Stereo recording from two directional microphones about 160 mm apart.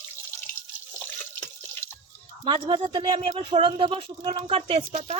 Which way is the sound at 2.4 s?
30° right (ahead or behind).